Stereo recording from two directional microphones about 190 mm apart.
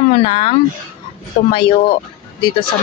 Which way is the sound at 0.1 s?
30° left (ahead or behind).